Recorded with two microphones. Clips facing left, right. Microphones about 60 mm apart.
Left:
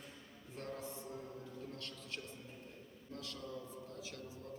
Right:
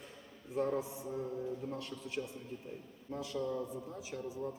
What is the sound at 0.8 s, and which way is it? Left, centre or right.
A man's voice, centre.